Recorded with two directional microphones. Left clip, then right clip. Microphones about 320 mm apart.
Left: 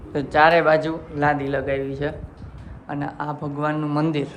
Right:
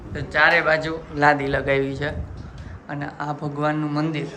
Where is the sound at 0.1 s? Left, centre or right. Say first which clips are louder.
Left 2 dB; centre.